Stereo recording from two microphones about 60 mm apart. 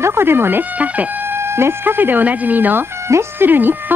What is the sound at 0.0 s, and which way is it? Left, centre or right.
Speech, right.